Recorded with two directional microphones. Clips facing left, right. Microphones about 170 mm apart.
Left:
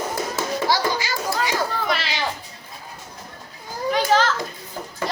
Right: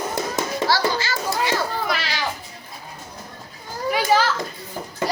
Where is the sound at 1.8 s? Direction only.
Centre (ahead or behind).